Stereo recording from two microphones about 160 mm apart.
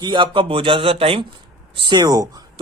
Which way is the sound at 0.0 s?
30° right (ahead or behind).